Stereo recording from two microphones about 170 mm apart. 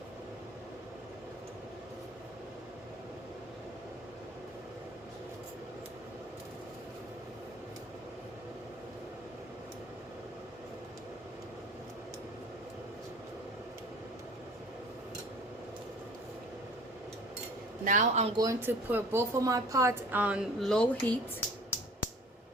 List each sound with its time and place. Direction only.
17.8 s a man's voice: 45° right (ahead or behind)
18.3 s speech: 15° right (ahead or behind); by 21.1 s 5° left (ahead or behind)